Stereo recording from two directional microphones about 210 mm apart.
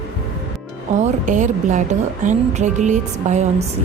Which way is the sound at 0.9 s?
35° right (ahead or behind).